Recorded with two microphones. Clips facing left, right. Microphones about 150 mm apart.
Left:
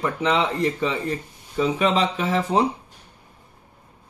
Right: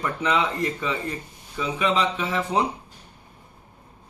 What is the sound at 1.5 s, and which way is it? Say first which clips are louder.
A man's voice: left 4 dB; 35° left (ahead or behind).